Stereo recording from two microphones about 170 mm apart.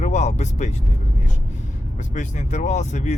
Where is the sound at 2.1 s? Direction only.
45° left (ahead or behind).